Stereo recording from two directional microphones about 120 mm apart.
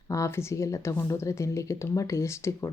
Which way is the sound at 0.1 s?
25° left (ahead or behind).